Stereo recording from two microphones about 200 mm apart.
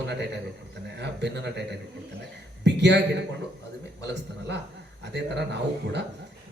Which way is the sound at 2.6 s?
60° right (ahead or behind).